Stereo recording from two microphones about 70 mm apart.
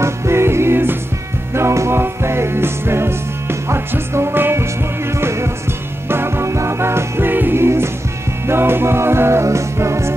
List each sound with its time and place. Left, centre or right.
0.0 s music: right
6.0 s music: right